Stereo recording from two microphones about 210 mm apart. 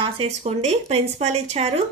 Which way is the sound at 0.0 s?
30° right (ahead or behind).